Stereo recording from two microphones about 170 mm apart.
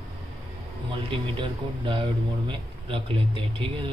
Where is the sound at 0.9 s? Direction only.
30° right (ahead or behind).